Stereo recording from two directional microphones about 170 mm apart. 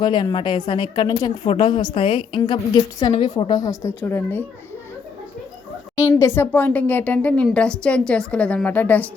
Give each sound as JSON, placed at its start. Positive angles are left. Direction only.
{"t": 0.0, "sound": "a woman's voice", "side_deg": 25}
{"t": 6.0, "sound": "a woman's voice", "side_deg": 15}